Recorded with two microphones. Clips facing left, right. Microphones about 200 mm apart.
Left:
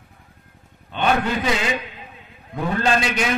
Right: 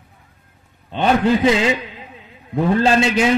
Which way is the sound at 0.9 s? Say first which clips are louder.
Right 5 dB; 30° right (ahead or behind).